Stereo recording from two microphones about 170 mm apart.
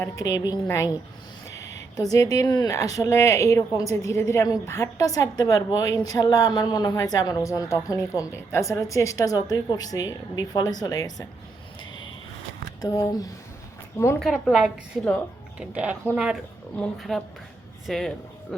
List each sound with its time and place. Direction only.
0.0 s a woman's voice: 20° left (ahead or behind)
1.5 s a sound: 20° left (ahead or behind)
2.0 s a woman's voice: 20° left (ahead or behind)
12.8 s a woman's voice: 20° left (ahead or behind)
14.2 s a woman's voice: centre (ahead or behind)